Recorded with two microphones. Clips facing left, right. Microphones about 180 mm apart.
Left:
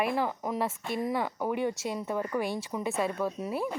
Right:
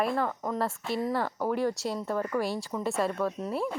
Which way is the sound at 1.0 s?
15° left (ahead or behind).